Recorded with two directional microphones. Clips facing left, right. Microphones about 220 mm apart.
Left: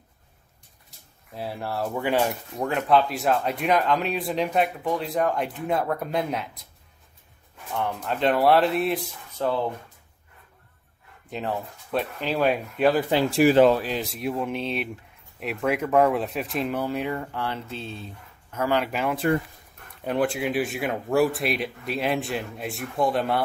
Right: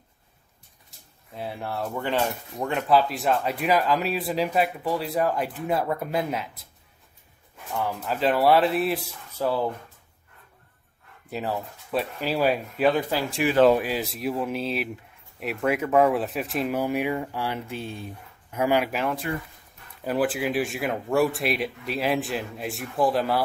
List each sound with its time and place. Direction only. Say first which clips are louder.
0.8 s speech: even; centre (ahead or behind)
7.7 s speech: even; 5° right (ahead or behind)
11.2 s speech: even; 5° right (ahead or behind)
13.4 s speech: left 7 dB; 40° left (ahead or behind)
13.7 s speech: right 1 dB; 5° right (ahead or behind)